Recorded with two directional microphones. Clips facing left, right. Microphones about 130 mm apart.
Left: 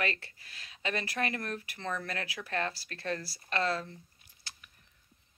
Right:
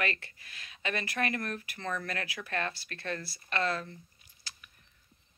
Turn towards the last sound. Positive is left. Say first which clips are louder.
# right 1 dB
turn(degrees=35)  # may be behind; listen again after turning